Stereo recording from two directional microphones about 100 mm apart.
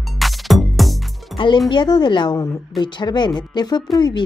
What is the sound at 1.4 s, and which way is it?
A woman's voice, 50° left (ahead or behind).